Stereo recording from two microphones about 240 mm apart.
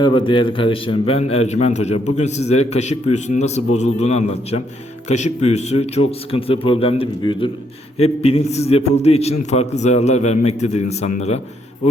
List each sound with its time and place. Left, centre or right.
0.0 s a man's voice: left